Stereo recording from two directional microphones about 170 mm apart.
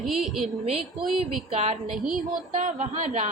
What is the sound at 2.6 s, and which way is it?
Speech, 50° right (ahead or behind).